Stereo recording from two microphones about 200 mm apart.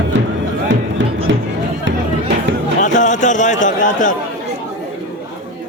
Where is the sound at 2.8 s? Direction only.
40° left (ahead or behind).